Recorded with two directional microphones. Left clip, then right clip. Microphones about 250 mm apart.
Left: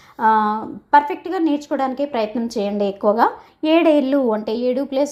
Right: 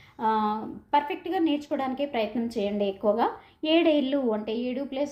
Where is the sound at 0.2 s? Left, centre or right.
Left.